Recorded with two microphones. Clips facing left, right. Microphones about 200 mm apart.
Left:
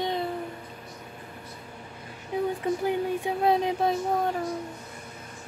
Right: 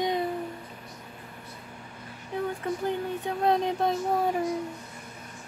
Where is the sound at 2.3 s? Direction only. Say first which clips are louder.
Left 3 dB; 10° left (ahead or behind).